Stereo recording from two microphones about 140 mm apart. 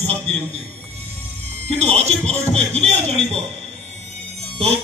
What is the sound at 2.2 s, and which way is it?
Speech, 50° right (ahead or behind).